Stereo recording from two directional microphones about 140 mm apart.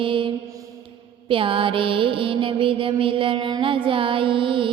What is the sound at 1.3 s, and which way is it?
Mantra, 40° right (ahead or behind).